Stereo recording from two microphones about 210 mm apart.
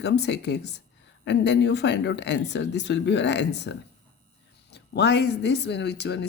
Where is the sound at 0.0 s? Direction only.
55° left (ahead or behind).